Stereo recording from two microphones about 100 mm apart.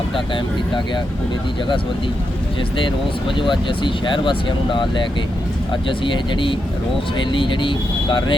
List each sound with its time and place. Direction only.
2.8 s speech: 55° left (ahead or behind)
6.1 s speech: 55° left (ahead or behind)